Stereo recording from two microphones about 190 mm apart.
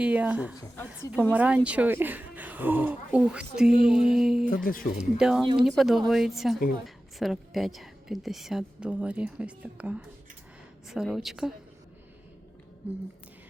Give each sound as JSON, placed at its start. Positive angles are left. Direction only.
{"t": 0.0, "sound": "a woman's voice", "side_deg": -5}
{"t": 4.4, "sound": "speech", "side_deg": 45}
{"t": 5.1, "sound": "a woman's voice", "side_deg": -5}